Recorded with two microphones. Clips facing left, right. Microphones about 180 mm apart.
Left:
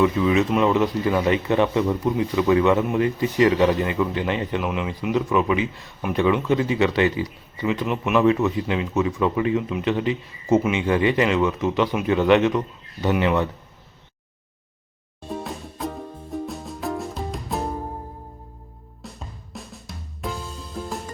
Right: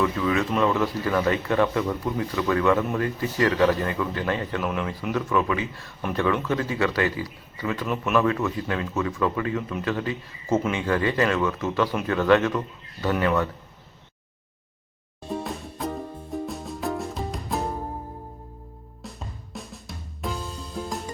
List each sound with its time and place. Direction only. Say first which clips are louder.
0.0 s speech: left 5 dB; 20° left (ahead or behind)
15.3 s music: even; centre (ahead or behind)
19.0 s music: even; centre (ahead or behind)